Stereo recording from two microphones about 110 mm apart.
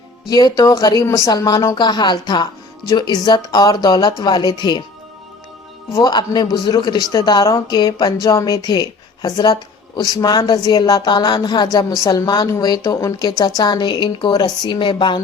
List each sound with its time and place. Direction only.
0.3 s a man's voice: 35° left (ahead or behind)
6.0 s a man's voice: 40° left (ahead or behind)